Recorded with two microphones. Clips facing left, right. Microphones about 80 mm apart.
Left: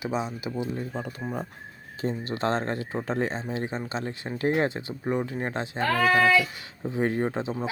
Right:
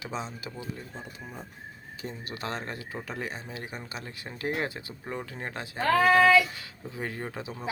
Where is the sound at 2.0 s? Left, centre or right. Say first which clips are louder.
Left 9 dB; left.